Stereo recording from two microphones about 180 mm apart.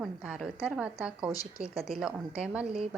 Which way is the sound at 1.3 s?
20° left (ahead or behind).